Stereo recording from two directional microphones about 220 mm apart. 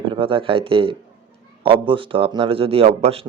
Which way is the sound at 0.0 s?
20° right (ahead or behind).